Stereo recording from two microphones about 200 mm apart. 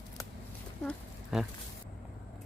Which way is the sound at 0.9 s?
Centre (ahead or behind).